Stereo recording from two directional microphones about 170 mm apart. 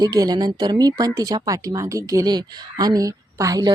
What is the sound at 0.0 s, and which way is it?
Speech, 20° right (ahead or behind).